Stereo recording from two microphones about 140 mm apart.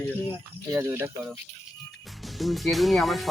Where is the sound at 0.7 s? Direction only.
20° right (ahead or behind).